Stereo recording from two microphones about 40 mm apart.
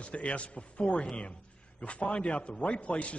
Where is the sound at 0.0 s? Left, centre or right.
Left.